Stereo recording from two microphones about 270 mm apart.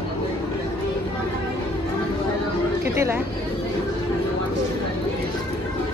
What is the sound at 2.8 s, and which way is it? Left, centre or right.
Speech, centre.